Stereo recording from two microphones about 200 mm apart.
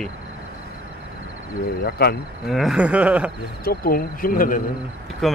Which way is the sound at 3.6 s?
45° left (ahead or behind).